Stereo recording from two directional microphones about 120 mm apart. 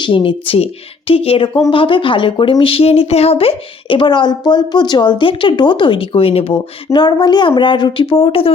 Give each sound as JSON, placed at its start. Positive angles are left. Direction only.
{"t": 0.0, "sound": "speech", "side_deg": 45}
{"t": 6.9, "sound": "speech", "side_deg": 35}